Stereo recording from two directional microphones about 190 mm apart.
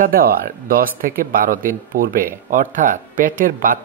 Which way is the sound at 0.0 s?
50° right (ahead or behind).